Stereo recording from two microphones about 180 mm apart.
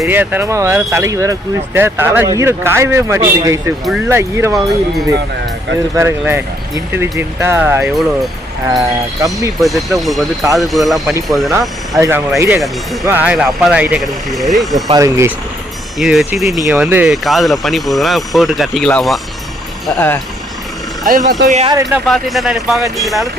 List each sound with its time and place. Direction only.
0.0 s speech: 10° right (ahead or behind)
6.0 s speech: 15° right (ahead or behind)
7.8 s speech: centre (ahead or behind)
8.7 s speech: 20° right (ahead or behind)
9.6 s speech: centre (ahead or behind)
11.9 s speech: 15° right (ahead or behind); by 14.8 s centre (ahead or behind)
14.9 s speech: 15° right (ahead or behind)
16.0 s speech: centre (ahead or behind)
21.0 s speech: 50° right (ahead or behind)
21.8 s speech: centre (ahead or behind)